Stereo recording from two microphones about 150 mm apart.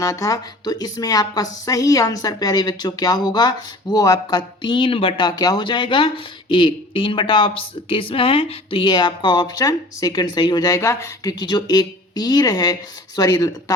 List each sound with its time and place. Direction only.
0.0 s speech: 25° left (ahead or behind)